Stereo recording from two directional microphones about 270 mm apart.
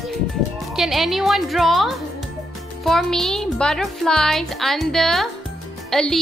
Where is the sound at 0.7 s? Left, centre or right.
Centre.